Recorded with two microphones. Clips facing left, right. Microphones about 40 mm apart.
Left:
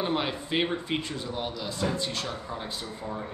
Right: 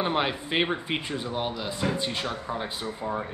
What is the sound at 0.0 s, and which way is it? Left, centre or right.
Speech, right.